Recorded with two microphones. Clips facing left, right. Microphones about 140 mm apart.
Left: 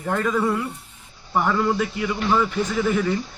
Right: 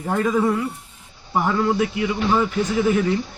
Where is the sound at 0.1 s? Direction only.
10° right (ahead or behind).